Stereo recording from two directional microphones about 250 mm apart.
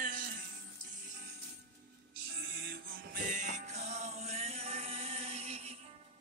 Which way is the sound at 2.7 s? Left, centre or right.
Right.